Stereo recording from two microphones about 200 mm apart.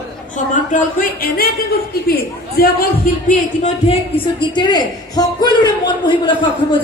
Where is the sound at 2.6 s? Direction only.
50° left (ahead or behind).